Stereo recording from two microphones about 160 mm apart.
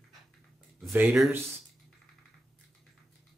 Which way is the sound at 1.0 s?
Centre (ahead or behind).